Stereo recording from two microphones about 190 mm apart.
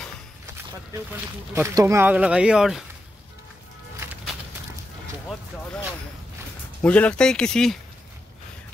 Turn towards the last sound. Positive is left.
turn(degrees=5)  # may be behind; listen again after turning